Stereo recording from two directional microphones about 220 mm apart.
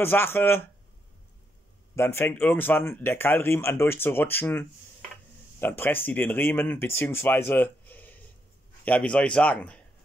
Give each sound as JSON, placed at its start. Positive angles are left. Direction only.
{"t": 0.0, "sound": "speech", "side_deg": 10}
{"t": 2.0, "sound": "a man's voice", "side_deg": 10}